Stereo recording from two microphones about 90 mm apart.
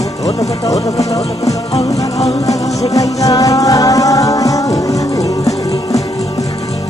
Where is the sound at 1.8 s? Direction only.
40° left (ahead or behind).